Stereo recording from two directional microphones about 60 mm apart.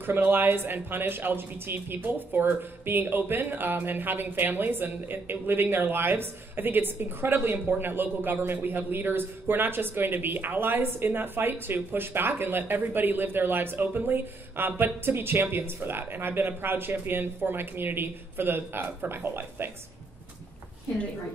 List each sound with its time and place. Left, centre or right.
0.0 s speech: right